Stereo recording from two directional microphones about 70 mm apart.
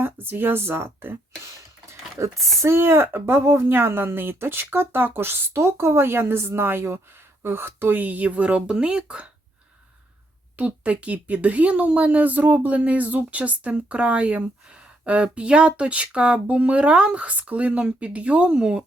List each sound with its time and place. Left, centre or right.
0.0 s speech: right
1.9 s speech: right; by 9.3 s centre
10.6 s speech: right